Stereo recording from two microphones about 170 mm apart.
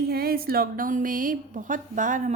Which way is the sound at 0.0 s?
65° right (ahead or behind).